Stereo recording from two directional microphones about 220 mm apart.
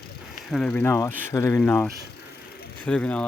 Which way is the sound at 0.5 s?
5° left (ahead or behind).